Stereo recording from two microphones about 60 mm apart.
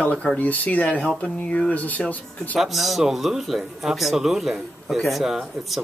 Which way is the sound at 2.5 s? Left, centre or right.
Centre.